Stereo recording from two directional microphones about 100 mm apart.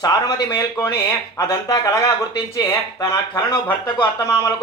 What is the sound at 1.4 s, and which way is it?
Speech, 35° left (ahead or behind).